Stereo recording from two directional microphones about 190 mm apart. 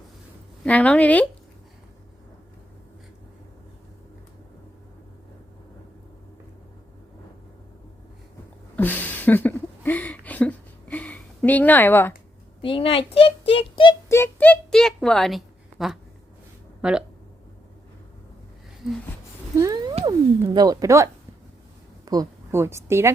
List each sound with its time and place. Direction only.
0.6 s speech: 5° left (ahead or behind)
8.7 s a sound: 10° left (ahead or behind)
12.6 s a child's voice: 30° left (ahead or behind)
14.1 s speech: 10° left (ahead or behind); by 17.0 s 5° right (ahead or behind)
18.8 s a sound: centre (ahead or behind)
19.5 s cat: 20° right (ahead or behind)
20.1 s a woman's voice: 20° right (ahead or behind)